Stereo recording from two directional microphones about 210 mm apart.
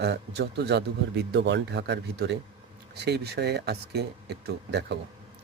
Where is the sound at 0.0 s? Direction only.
55° right (ahead or behind).